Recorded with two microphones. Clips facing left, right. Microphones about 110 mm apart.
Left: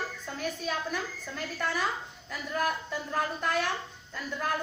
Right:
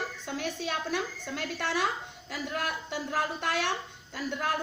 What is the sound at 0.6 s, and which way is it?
A woman's voice, 75° right (ahead or behind).